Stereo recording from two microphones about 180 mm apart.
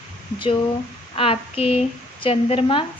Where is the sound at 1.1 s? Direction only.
30° left (ahead or behind).